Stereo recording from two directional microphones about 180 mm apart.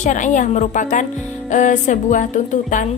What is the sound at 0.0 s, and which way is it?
A woman's voice, 45° left (ahead or behind).